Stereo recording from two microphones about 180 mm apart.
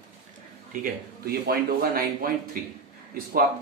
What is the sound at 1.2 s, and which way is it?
A man's voice, 55° right (ahead or behind).